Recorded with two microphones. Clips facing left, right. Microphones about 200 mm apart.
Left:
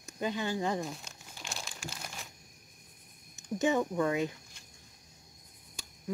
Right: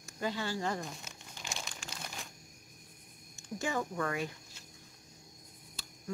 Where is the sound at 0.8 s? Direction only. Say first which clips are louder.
Left 4 dB; centre (ahead or behind).